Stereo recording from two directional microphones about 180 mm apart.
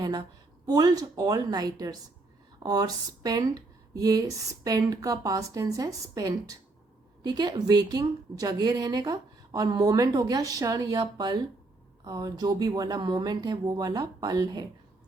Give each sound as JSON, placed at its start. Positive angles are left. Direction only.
{"t": 0.6, "sound": "a woman's voice", "side_deg": -20}